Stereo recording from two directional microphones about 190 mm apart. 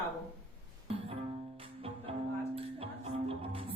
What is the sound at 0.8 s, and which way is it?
Music, 30° right (ahead or behind).